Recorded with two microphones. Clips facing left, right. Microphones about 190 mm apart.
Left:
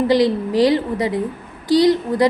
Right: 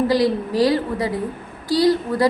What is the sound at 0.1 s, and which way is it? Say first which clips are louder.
A woman's voice: left 3 dB; 20° left (ahead or behind).